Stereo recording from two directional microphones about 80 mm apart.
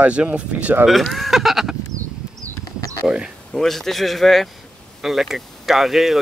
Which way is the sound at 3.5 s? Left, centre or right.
Centre.